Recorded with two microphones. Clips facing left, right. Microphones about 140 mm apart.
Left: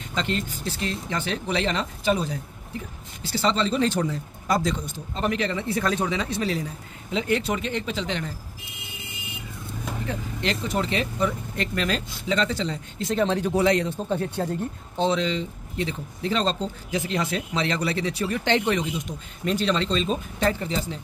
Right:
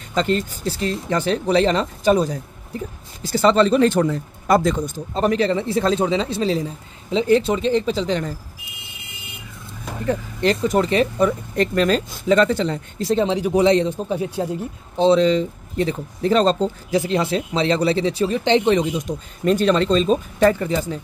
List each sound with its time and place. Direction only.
0.1 s speech: 40° right (ahead or behind)
10.0 s speech: 40° right (ahead or behind)
13.2 s speech: 15° right (ahead or behind)
14.0 s speech: 10° right (ahead or behind)
15.0 s speech: 40° right (ahead or behind); by 18.8 s 25° right (ahead or behind)
18.8 s speech: 40° right (ahead or behind)